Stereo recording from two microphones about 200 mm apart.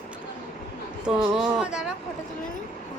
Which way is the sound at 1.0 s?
5° right (ahead or behind).